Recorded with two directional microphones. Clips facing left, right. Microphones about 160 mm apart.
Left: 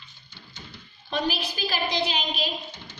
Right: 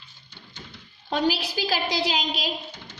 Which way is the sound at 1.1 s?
90° right.